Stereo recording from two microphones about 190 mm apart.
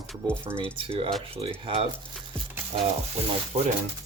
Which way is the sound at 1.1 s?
Centre (ahead or behind).